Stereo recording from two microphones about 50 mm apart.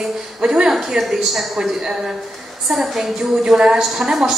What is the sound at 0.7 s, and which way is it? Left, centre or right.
Speech, centre.